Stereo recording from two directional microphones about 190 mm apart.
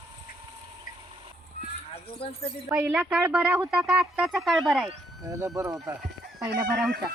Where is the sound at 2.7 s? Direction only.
10° right (ahead or behind).